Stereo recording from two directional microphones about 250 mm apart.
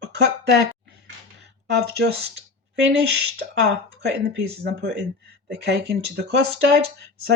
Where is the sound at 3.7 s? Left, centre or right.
Right.